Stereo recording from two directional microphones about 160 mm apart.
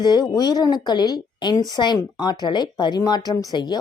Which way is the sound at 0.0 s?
25° left (ahead or behind).